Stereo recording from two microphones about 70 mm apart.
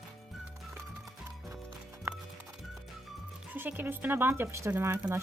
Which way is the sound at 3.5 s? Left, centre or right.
Right.